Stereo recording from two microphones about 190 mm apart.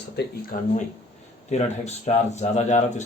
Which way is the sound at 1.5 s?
35° left (ahead or behind).